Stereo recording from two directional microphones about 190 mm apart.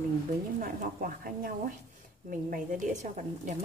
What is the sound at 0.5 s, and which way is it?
A woman's voice, 45° right (ahead or behind).